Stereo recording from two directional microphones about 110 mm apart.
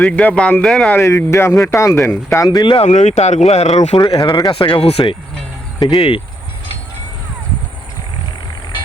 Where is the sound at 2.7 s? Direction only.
90° left; by 6.2 s 55° left (ahead or behind).